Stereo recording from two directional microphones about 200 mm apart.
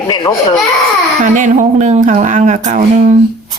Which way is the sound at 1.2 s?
40° right (ahead or behind).